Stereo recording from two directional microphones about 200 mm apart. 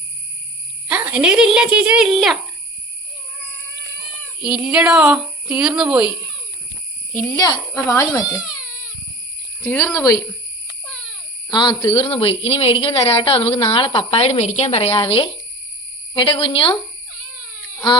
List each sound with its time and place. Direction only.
0.9 s speech: 5° right (ahead or behind)
4.4 s speech: 5° right (ahead or behind)
7.1 s a child's voice: 10° left (ahead or behind)
8.4 s baby cry: 5° right (ahead or behind)
9.6 s a child's voice: 15° left (ahead or behind)
11.5 s a woman's voice: 20° left (ahead or behind)